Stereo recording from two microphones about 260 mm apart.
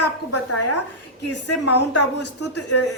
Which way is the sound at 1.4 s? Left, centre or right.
Left.